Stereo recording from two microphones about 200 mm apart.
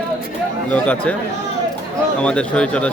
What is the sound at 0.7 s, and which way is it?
Speech, 5° left (ahead or behind).